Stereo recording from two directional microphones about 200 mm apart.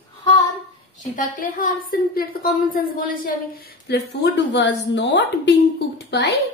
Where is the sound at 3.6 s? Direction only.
55° left (ahead or behind).